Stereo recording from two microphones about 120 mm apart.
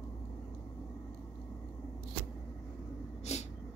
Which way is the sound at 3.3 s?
65° left (ahead or behind).